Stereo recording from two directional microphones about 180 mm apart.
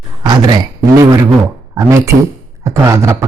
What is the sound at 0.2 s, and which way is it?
A man's voice, 20° right (ahead or behind).